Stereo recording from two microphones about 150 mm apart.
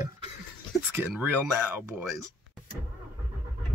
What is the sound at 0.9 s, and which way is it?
Speech, 10° right (ahead or behind).